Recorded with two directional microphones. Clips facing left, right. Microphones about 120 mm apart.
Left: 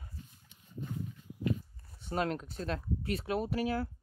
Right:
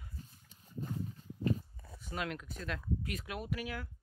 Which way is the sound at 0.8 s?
40° right (ahead or behind).